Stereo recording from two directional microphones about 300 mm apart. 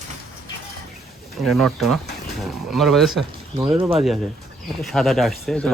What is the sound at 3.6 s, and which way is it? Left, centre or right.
Speech, centre.